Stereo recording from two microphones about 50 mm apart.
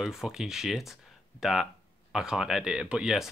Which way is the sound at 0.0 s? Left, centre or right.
Centre.